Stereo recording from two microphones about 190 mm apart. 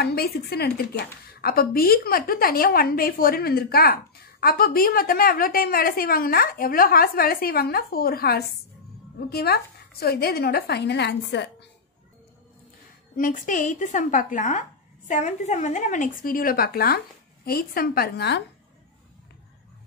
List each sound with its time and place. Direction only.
0.0 s a woman's voice: 55° left (ahead or behind)
13.1 s a woman's voice: 45° left (ahead or behind)